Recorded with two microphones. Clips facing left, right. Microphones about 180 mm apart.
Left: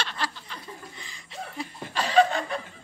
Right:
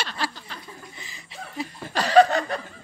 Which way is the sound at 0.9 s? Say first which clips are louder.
Left 1 dB; 5° right (ahead or behind).